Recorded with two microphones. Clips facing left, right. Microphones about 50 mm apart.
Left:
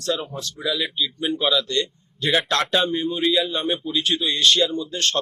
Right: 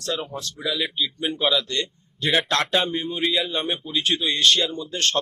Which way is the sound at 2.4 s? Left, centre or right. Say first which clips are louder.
Left 1 dB; right.